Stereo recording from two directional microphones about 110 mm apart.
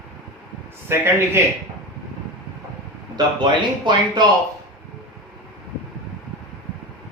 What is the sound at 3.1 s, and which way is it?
Speech, 45° right (ahead or behind).